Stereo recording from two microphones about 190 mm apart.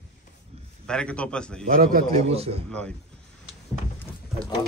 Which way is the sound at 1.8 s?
50° right (ahead or behind).